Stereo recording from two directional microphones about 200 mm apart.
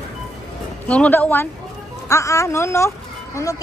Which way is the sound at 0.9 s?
10° left (ahead or behind).